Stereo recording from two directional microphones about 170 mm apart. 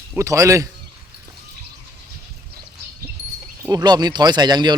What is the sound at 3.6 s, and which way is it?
Speech, 20° right (ahead or behind).